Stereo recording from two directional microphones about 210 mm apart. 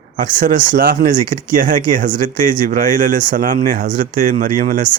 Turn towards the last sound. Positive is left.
turn(degrees=-40)  # may be behind; listen again after turning